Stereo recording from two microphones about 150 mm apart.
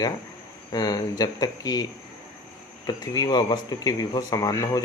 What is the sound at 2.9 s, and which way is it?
Speech, 25° left (ahead or behind).